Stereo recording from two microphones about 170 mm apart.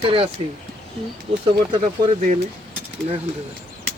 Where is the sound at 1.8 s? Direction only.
45° right (ahead or behind).